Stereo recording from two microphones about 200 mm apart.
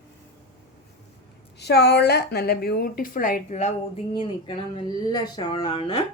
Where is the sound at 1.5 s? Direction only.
55° left (ahead or behind); by 6.0 s 20° left (ahead or behind).